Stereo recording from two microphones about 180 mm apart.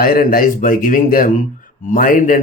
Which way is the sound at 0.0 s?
55° left (ahead or behind).